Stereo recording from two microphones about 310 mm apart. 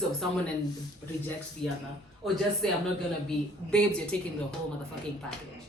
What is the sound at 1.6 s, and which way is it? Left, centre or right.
Speech, centre.